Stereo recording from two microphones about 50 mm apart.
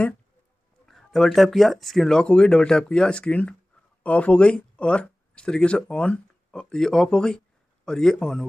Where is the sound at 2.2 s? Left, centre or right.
Centre.